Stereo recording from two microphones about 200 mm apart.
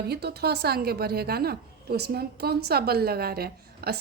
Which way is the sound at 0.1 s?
55° right (ahead or behind).